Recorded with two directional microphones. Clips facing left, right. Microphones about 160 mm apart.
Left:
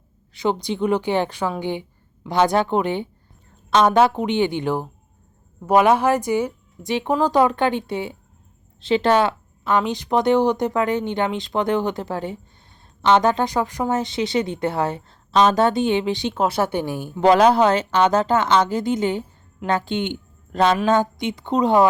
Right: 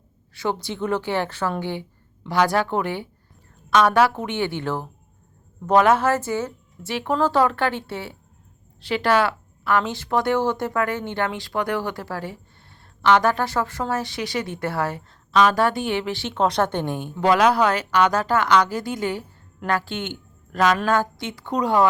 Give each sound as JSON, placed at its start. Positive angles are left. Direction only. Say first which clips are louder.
{"t": 0.3, "sound": "a woman's voice", "louder": "left 4 dB", "side_deg": 20}
{"t": 16.3, "sound": "a woman's voice", "louder": "right 2 dB", "side_deg": 5}
{"t": 17.2, "sound": "speech", "louder": "left 4 dB", "side_deg": 30}